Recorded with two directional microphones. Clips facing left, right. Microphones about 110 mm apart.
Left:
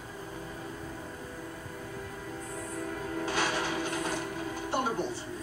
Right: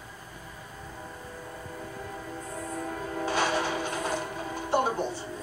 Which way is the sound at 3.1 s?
30° right (ahead or behind).